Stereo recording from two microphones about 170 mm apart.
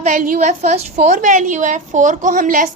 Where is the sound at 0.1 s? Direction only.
50° right (ahead or behind).